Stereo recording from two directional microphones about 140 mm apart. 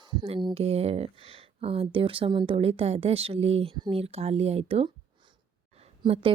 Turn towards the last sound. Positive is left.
turn(degrees=-40)  # may be behind; listen again after turning